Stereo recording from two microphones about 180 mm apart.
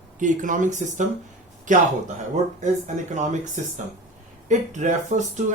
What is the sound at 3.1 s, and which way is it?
Speech, 40° right (ahead or behind).